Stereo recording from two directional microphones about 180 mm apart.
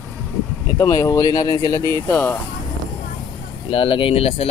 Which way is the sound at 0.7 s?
20° left (ahead or behind).